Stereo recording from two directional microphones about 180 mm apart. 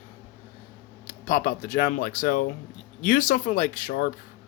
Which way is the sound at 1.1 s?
50° left (ahead or behind).